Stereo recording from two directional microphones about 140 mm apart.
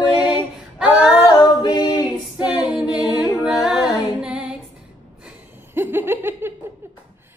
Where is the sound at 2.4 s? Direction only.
10° right (ahead or behind).